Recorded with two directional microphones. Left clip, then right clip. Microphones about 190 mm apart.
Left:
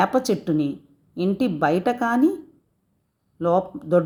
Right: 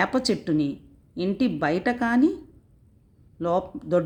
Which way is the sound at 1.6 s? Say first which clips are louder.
Left 5 dB; 5° right (ahead or behind).